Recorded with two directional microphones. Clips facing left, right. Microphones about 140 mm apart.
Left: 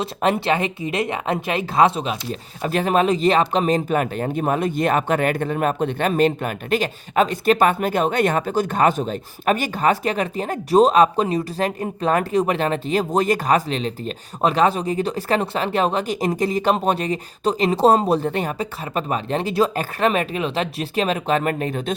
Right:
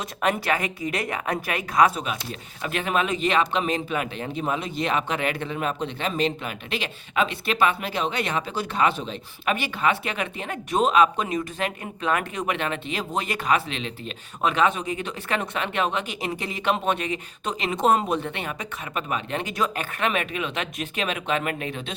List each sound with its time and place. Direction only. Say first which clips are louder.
0.0 s speech: left 5 dB; 30° left (ahead or behind)